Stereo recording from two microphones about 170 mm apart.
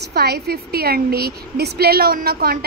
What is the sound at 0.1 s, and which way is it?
A woman's voice, 70° right (ahead or behind).